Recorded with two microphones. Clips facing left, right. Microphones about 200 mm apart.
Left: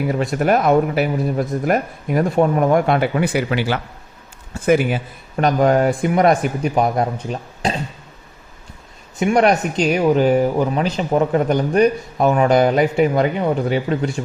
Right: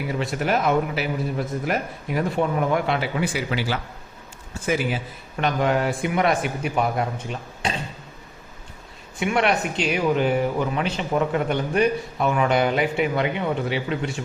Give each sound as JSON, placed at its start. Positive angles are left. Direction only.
{"t": 0.2, "sound": "a man's voice", "side_deg": 45}
{"t": 5.4, "sound": "speech", "side_deg": 40}
{"t": 9.1, "sound": "speech", "side_deg": 40}